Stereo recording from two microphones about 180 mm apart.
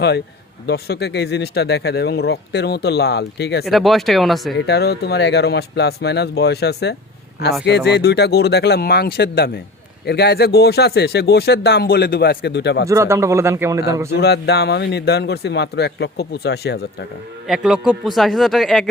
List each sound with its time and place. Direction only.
0.7 s speech: 65° left (ahead or behind)
3.7 s speech: centre (ahead or behind)
4.5 s speech: 65° left (ahead or behind)
12.9 s a man's voice: 15° right (ahead or behind)
14.1 s speech: 65° left (ahead or behind)
17.5 s speech: 5° right (ahead or behind)